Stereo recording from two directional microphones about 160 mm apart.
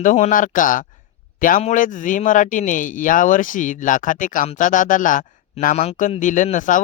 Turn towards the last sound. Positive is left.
turn(degrees=55)  # may be behind; listen again after turning